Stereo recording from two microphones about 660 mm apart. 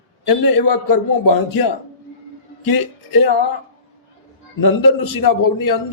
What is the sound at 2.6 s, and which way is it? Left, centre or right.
Speech, left.